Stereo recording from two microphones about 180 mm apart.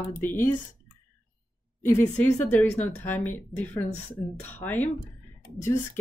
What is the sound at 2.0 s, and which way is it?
Speech, 10° left (ahead or behind).